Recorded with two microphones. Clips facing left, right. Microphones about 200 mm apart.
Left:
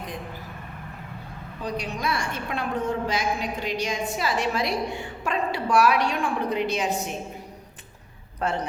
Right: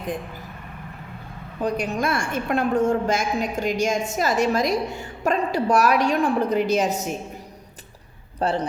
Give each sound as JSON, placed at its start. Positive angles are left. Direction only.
{"t": 1.6, "sound": "a woman's voice", "side_deg": -50}
{"t": 8.4, "sound": "speech", "side_deg": -30}